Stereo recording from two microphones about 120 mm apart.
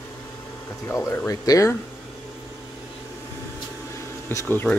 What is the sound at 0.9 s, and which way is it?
Speech, 25° left (ahead or behind).